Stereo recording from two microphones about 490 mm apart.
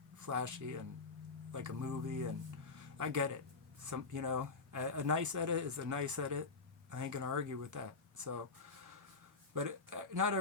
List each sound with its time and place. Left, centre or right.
0.2 s speech: right
2.7 s a sound: right
3.8 s speech: right